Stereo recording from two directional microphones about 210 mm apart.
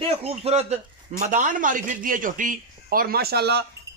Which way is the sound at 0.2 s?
30° right (ahead or behind).